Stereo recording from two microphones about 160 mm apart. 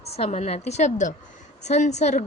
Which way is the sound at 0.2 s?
40° left (ahead or behind).